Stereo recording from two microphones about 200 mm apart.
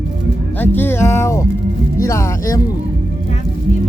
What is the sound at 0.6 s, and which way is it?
Speech, 10° left (ahead or behind).